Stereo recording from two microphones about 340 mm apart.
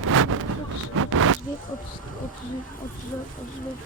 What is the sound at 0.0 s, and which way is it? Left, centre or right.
Vehicle, right.